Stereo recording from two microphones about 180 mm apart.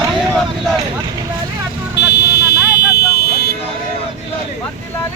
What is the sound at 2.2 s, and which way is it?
Vehicle, 65° left (ahead or behind).